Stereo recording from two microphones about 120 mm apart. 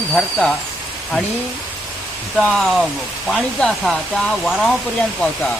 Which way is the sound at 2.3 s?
5° left (ahead or behind).